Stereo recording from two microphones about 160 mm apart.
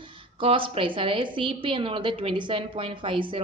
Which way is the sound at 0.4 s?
35° right (ahead or behind).